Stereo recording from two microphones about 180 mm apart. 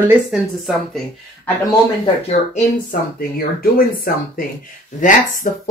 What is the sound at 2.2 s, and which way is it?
Speech, 45° left (ahead or behind).